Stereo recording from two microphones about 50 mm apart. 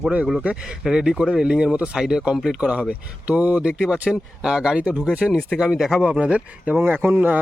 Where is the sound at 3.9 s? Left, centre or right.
Centre.